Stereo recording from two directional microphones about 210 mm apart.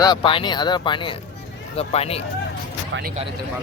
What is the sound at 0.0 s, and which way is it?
Speech, 20° left (ahead or behind).